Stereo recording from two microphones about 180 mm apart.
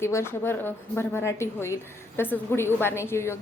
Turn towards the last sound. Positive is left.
turn(degrees=15)  # may be behind; listen again after turning